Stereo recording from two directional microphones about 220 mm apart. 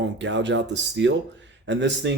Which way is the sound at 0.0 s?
55° right (ahead or behind).